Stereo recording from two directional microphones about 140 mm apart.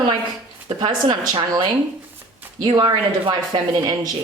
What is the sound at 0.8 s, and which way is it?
Speech, 35° right (ahead or behind).